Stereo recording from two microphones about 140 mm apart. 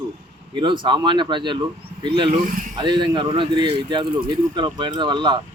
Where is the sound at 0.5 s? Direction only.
35° right (ahead or behind).